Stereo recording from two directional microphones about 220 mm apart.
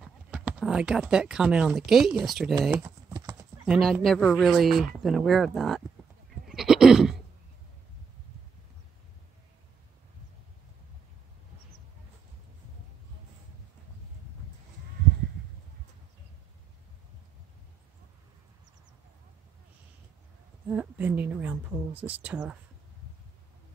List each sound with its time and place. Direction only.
0.0 s speech: 5° right (ahead or behind)
2.7 s typing: 15° right (ahead or behind)
3.6 s speech: centre (ahead or behind)
6.4 s goat: centre (ahead or behind)
20.6 s a sound: 5° right (ahead or behind)